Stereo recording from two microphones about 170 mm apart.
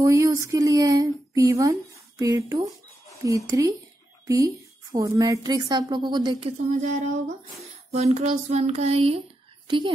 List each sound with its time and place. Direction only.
0.0 s a woman's voice: 15° right (ahead or behind)
4.9 s a woman's voice: 20° right (ahead or behind)
6.7 s a woman's voice: 45° right (ahead or behind)